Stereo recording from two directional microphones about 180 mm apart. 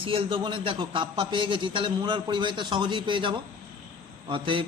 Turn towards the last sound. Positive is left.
turn(degrees=-30)  # may be behind; listen again after turning